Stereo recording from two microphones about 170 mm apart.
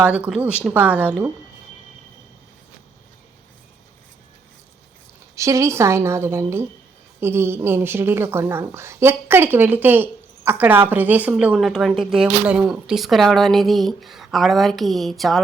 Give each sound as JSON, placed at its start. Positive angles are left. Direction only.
{"t": 0.0, "sound": "a woman's voice", "side_deg": -10}
{"t": 5.4, "sound": "a woman's voice", "side_deg": -20}